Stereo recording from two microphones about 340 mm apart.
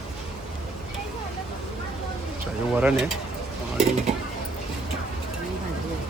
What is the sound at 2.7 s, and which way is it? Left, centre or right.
Speech, centre.